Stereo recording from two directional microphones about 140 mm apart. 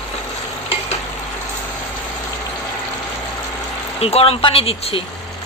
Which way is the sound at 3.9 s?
45° left (ahead or behind).